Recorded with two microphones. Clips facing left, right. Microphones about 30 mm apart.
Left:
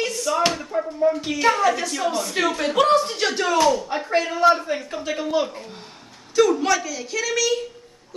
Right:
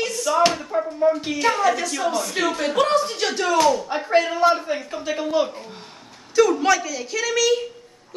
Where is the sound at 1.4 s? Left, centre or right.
Centre.